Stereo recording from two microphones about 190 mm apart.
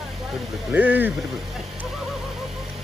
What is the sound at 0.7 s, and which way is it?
Speech, 10° right (ahead or behind).